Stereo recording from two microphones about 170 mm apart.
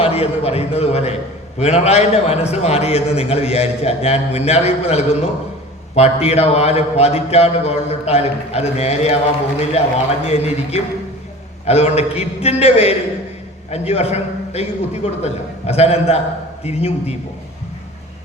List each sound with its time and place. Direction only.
0.0 s a man's voice: 35° left (ahead or behind)